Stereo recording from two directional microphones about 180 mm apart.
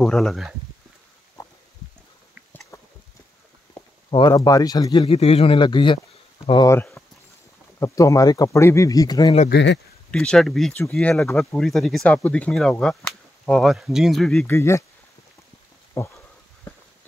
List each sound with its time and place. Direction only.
0.0 s speech: centre (ahead or behind)
1.4 s a sound: 20° left (ahead or behind)
4.1 s speech: 25° left (ahead or behind)
6.7 s speech: 15° left (ahead or behind)
9.5 s speech: 80° left
10.1 s speech: 5° left (ahead or behind)
14.5 s speech: 15° left (ahead or behind)
16.0 s speech: 15° left (ahead or behind)